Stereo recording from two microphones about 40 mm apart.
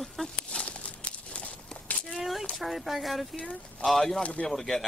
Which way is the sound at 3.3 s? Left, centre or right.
Left.